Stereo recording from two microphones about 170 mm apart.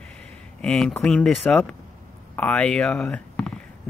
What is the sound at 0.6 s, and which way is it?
Speech, 5° left (ahead or behind).